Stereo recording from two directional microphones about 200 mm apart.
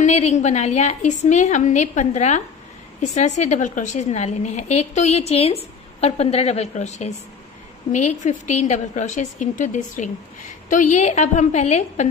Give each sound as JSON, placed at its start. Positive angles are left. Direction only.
{"t": 0.0, "sound": "a woman's voice", "side_deg": 35}